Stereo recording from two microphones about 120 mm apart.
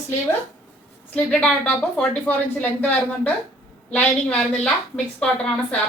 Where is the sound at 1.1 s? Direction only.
10° left (ahead or behind).